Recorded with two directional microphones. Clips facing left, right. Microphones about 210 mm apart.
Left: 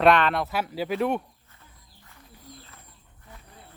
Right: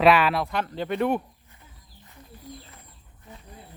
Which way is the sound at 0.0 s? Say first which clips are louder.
Right 1 dB; 5° right (ahead or behind).